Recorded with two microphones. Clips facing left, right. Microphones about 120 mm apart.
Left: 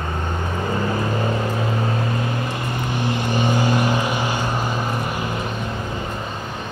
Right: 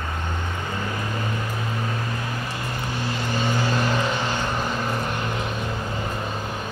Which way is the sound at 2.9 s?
15° left (ahead or behind).